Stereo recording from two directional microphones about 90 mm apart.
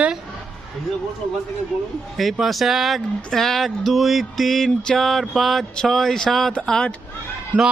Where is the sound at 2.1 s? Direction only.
Centre (ahead or behind).